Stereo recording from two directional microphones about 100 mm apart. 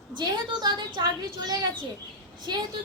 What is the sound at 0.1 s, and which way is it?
A woman's voice, 45° right (ahead or behind).